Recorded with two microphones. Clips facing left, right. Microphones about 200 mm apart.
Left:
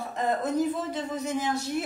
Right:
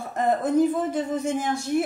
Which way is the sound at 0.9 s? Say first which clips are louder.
Right 5 dB; 50° right (ahead or behind).